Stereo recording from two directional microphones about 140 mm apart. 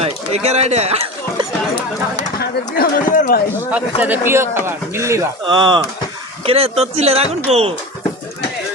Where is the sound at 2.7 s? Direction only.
80° left.